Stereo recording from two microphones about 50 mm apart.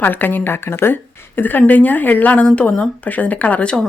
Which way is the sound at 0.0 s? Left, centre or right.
Left.